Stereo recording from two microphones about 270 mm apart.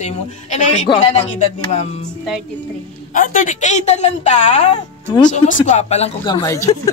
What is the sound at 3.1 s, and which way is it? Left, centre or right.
Speech, left.